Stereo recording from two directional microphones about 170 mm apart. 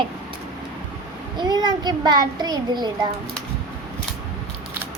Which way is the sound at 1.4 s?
25° right (ahead or behind).